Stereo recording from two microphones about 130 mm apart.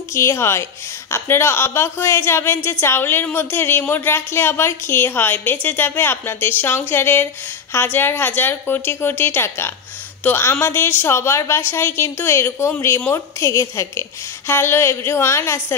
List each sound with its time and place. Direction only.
0.1 s a woman's voice: 20° left (ahead or behind)